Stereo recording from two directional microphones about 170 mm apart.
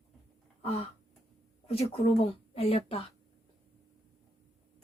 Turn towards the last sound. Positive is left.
turn(degrees=35)  # may be behind; listen again after turning